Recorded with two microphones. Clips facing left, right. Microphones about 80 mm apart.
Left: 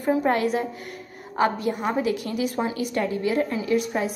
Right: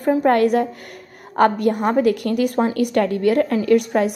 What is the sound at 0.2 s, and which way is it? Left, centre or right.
A woman's voice, right.